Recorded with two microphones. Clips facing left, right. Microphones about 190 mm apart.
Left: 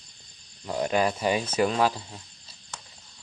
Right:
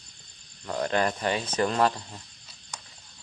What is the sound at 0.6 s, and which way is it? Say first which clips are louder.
Speech: left 1 dB; 10° left (ahead or behind).